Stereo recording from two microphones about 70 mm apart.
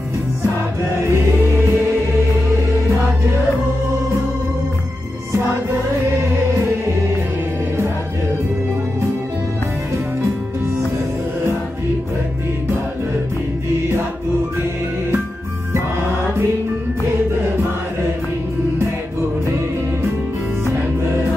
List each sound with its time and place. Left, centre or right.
1.1 s music: right